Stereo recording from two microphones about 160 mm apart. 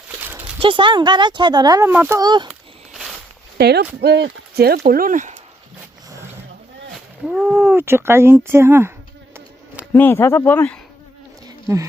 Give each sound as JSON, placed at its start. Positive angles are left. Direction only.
{"t": 0.2, "sound": "dog", "side_deg": -10}
{"t": 0.6, "sound": "speech", "side_deg": -30}
{"t": 1.9, "sound": "speech", "side_deg": -10}
{"t": 2.1, "sound": "speech", "side_deg": -25}
{"t": 2.5, "sound": "a sound", "side_deg": 0}
{"t": 3.6, "sound": "speech", "side_deg": -90}
{"t": 4.9, "sound": "speech", "side_deg": -60}
{"t": 7.3, "sound": "speech", "side_deg": 0}
{"t": 7.8, "sound": "speech", "side_deg": -15}
{"t": 9.9, "sound": "speech", "side_deg": 15}